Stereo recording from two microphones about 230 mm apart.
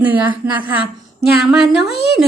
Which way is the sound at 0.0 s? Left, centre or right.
Centre.